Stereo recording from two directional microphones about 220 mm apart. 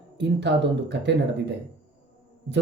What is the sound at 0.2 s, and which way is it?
Speech, 55° right (ahead or behind).